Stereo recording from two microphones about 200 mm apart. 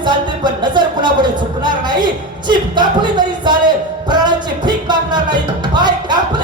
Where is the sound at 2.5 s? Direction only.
20° right (ahead or behind).